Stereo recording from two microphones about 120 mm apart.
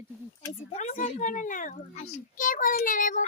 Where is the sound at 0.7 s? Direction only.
75° left (ahead or behind).